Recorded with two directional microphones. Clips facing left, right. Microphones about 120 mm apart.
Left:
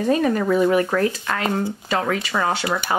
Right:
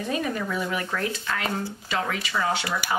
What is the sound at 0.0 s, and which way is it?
Speech, 45° left (ahead or behind).